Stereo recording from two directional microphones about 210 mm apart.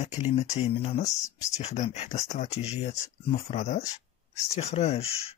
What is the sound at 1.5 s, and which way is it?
Speech, 35° left (ahead or behind).